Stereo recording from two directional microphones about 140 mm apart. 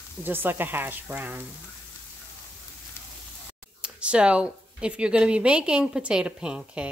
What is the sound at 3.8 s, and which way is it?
Speech, 10° right (ahead or behind).